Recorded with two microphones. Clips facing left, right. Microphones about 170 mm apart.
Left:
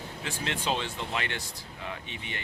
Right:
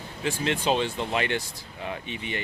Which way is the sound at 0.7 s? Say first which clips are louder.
Right 6 dB; 15° right (ahead or behind).